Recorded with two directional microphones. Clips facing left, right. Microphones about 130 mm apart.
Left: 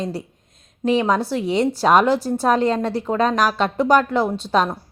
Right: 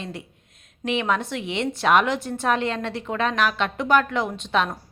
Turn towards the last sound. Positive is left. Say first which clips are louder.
# left 5 dB
turn(degrees=35)  # may be behind; listen again after turning